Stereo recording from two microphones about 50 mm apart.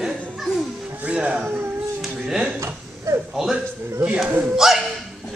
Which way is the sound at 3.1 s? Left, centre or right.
Right.